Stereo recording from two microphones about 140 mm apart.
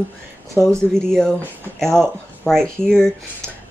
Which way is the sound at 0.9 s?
5° left (ahead or behind).